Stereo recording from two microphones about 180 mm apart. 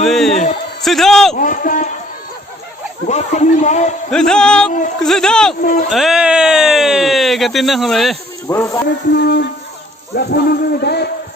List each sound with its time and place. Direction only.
0.0 s a sound: centre (ahead or behind)
1.4 s a man's voice: 50° left (ahead or behind)
3.1 s speech: 40° left (ahead or behind)
4.1 s a sound: 5° left (ahead or behind)
5.9 s speech: centre (ahead or behind)
8.4 s music: 15° left (ahead or behind)
9.1 s speech: 65° left (ahead or behind)